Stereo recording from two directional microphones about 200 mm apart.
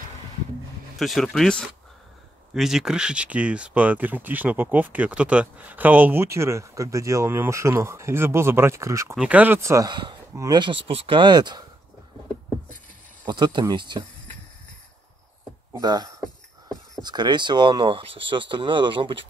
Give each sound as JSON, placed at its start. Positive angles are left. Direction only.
{"t": 0.9, "sound": "speech", "side_deg": 0}
{"t": 13.2, "sound": "speech", "side_deg": -20}
{"t": 15.7, "sound": "speech", "side_deg": -20}